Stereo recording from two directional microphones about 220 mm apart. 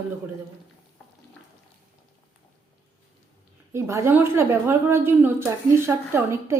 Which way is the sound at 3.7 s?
15° right (ahead or behind).